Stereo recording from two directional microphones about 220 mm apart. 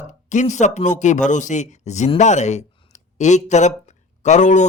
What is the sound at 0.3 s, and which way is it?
Speech, 35° left (ahead or behind).